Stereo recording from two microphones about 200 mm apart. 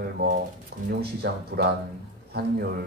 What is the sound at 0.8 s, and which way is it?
Speech, 55° right (ahead or behind).